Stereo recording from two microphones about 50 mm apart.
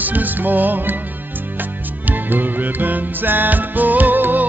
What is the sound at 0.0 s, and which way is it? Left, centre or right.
Music, right.